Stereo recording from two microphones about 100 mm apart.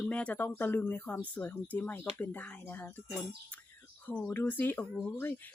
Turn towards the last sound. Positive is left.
turn(degrees=20)  # may be behind; listen again after turning